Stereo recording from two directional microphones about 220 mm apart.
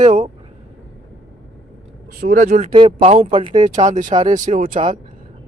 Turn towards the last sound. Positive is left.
turn(degrees=-25)  # may be behind; listen again after turning